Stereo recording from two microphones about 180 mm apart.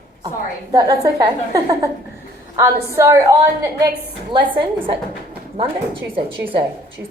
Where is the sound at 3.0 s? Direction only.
15° right (ahead or behind).